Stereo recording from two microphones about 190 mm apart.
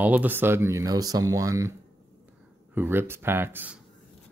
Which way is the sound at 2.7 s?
10° right (ahead or behind).